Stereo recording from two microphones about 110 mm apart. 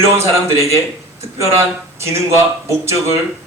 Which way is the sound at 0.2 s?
25° right (ahead or behind).